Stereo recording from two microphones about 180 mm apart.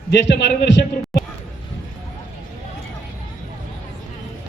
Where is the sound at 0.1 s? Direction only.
75° left (ahead or behind).